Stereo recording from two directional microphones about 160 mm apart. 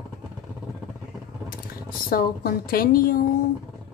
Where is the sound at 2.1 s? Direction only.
65° left (ahead or behind).